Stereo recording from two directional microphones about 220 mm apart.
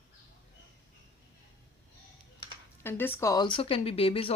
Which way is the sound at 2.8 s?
10° left (ahead or behind).